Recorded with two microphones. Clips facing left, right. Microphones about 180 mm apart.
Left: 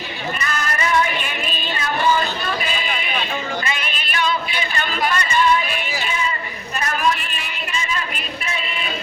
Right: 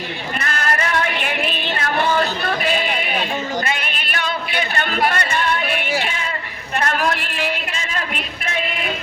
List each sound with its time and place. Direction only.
0.3 s music: 65° right (ahead or behind)
3.7 s yodeling: 60° right (ahead or behind)
6.7 s a sound: 70° right (ahead or behind)